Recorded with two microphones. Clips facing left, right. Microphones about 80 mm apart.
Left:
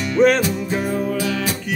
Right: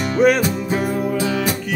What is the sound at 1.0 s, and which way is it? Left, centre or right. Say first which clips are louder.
Music: right 2 dB; centre.